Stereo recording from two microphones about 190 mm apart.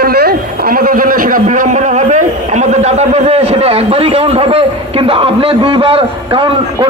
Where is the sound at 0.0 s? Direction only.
55° right (ahead or behind).